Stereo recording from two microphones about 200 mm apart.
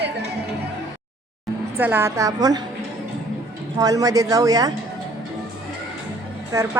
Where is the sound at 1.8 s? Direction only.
10° right (ahead or behind).